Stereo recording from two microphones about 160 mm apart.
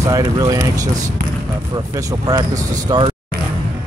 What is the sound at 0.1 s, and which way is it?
Speech, 20° right (ahead or behind).